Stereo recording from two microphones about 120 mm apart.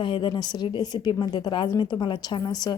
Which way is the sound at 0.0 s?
45° left (ahead or behind).